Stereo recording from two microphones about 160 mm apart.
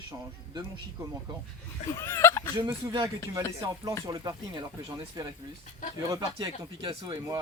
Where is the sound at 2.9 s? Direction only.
20° right (ahead or behind).